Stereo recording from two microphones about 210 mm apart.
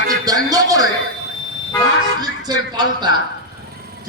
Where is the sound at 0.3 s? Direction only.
15° right (ahead or behind).